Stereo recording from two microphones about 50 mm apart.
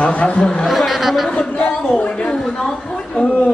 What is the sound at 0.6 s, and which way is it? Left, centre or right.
Speech, centre.